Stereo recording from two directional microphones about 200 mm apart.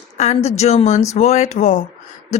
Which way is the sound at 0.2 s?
35° left (ahead or behind).